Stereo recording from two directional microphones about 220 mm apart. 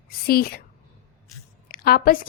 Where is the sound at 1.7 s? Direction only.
45° left (ahead or behind).